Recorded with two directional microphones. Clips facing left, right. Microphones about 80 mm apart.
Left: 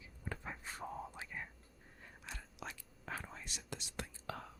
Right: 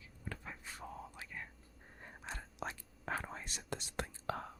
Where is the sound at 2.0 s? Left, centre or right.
Right.